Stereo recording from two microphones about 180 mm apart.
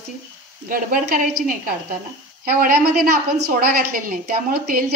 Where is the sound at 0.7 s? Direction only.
50° right (ahead or behind).